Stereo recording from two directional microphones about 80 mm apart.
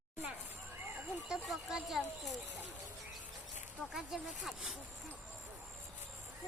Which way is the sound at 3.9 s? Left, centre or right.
Centre.